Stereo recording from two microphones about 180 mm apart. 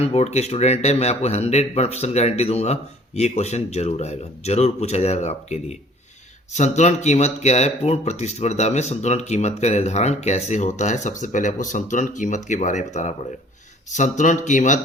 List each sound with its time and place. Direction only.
0.0 s speech: 35° left (ahead or behind)